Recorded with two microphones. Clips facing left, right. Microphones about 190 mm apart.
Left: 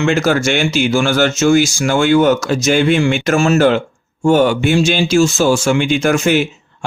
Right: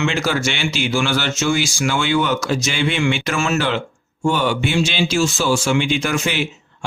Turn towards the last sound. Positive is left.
turn(degrees=45)  # may be behind; listen again after turning